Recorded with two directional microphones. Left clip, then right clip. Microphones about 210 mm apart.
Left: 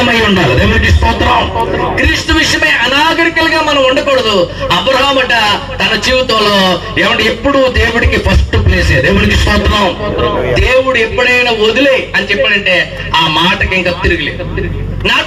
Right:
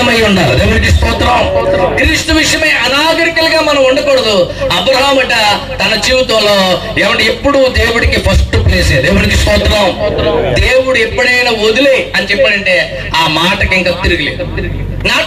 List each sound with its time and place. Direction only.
0.0 s music: 15° right (ahead or behind)
2.0 s a man's voice: 15° right (ahead or behind)